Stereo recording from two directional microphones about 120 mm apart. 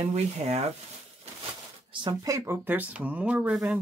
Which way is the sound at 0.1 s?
65° right (ahead or behind).